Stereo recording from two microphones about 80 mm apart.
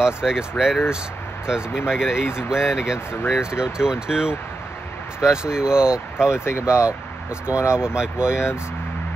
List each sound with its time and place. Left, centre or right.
0.0 s speech: centre
6.4 s speech: left
7.7 s speech: centre